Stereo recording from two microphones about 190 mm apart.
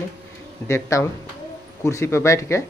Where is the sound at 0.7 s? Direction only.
15° left (ahead or behind).